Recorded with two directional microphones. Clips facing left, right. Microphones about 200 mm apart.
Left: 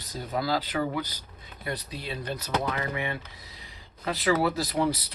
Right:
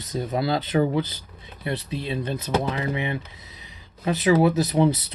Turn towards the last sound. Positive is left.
turn(degrees=-20)  # may be behind; listen again after turning